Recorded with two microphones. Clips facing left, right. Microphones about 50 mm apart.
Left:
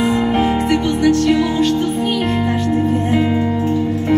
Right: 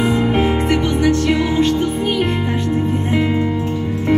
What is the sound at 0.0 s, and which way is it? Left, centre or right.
Music, centre.